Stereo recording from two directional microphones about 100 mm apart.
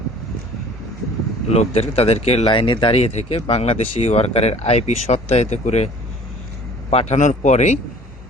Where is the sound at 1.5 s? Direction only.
85° left.